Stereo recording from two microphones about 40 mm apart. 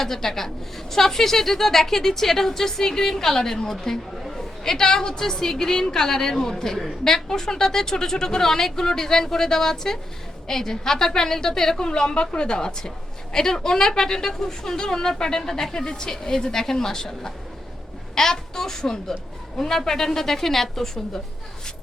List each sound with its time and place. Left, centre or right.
0.0 s speech: centre
4.2 s chatter: centre
4.6 s speech: centre